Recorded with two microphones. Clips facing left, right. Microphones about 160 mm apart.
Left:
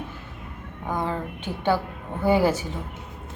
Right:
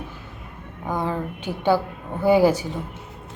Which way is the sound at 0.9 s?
10° right (ahead or behind).